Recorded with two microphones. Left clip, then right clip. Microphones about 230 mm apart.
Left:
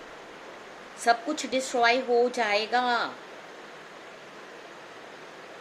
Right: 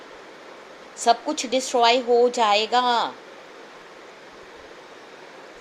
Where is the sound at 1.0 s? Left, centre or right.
Centre.